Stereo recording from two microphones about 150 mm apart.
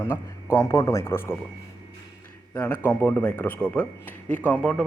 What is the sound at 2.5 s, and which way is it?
Speech, 15° left (ahead or behind).